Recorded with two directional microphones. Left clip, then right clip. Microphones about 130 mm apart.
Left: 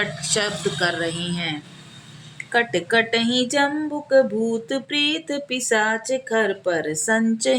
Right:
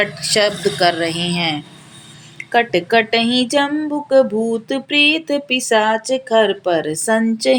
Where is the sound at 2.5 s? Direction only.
15° right (ahead or behind).